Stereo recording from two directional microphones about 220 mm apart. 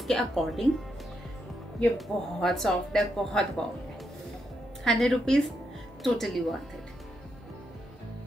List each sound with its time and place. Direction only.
0.0 s speech: centre (ahead or behind)
1.8 s speech: centre (ahead or behind)
4.8 s speech: centre (ahead or behind)